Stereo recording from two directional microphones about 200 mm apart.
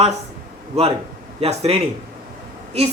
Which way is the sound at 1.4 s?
30° right (ahead or behind).